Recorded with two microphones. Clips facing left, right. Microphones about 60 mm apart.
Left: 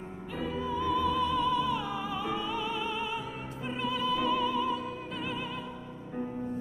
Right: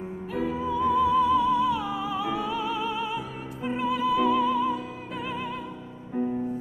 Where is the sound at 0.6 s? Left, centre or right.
Right.